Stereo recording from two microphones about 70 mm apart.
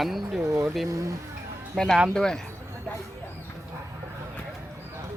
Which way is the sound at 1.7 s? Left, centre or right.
Centre.